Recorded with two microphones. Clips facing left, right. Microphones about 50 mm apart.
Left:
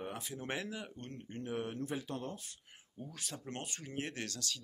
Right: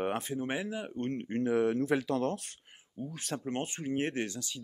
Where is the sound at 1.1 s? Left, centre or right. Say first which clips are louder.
Right 11 dB; right.